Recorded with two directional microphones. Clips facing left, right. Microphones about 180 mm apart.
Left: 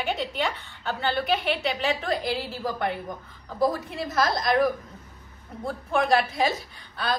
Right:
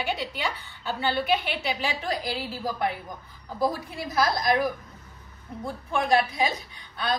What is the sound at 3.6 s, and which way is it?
A woman's voice, centre (ahead or behind).